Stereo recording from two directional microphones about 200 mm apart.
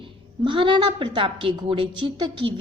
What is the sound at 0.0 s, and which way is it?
A woman's voice, 25° right (ahead or behind).